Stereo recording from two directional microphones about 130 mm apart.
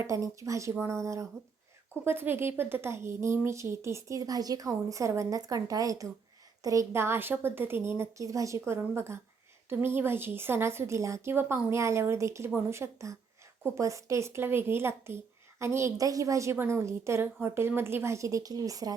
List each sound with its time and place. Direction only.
0.0 s a woman's voice: 25° right (ahead or behind)